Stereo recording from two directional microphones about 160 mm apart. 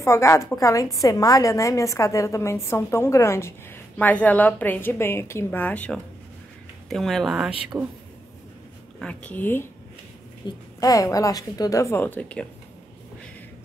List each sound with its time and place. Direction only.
0.0 s a woman's voice: 15° left (ahead or behind); by 7.9 s 10° right (ahead or behind)
9.0 s a woman's voice: 10° left (ahead or behind)
10.4 s a woman's voice: 30° left (ahead or behind); by 12.4 s 10° left (ahead or behind)